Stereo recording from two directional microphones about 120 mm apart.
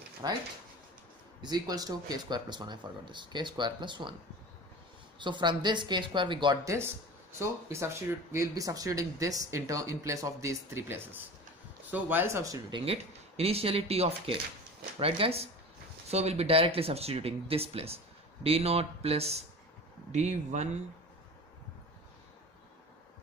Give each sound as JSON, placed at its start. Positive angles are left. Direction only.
{"t": 0.2, "sound": "speech", "side_deg": -35}
{"t": 1.4, "sound": "speech", "side_deg": -35}
{"t": 5.2, "sound": "speech", "side_deg": -40}
{"t": 6.6, "sound": "speech", "side_deg": -25}
{"t": 12.7, "sound": "speech", "side_deg": -55}
{"t": 20.1, "sound": "speech", "side_deg": -70}